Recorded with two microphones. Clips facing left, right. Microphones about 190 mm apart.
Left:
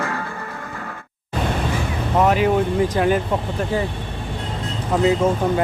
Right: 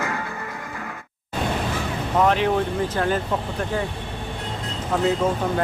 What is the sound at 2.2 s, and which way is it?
Speech, 5° left (ahead or behind).